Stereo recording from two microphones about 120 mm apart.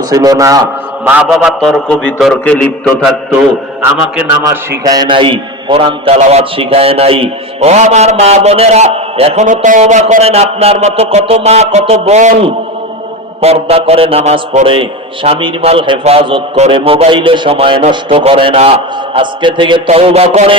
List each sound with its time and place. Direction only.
0.1 s a man's voice: 30° right (ahead or behind)
1.3 s a man's voice: 5° right (ahead or behind)
2.3 s a sound: 10° left (ahead or behind)
4.4 s a man's voice: 30° right (ahead or behind)
5.0 s a man's voice: 45° right (ahead or behind)
6.1 s speech: 75° right (ahead or behind)
6.4 s a man's voice: 50° right (ahead or behind)
19.9 s a man's voice: 55° right (ahead or behind)